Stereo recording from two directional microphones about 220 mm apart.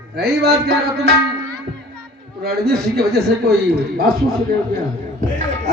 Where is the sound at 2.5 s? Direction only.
45° right (ahead or behind).